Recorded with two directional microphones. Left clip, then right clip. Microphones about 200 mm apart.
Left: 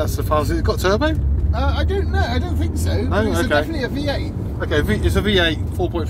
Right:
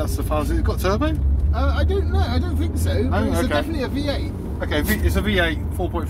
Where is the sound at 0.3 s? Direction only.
5° right (ahead or behind).